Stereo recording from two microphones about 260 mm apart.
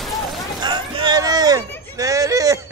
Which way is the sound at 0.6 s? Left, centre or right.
Centre.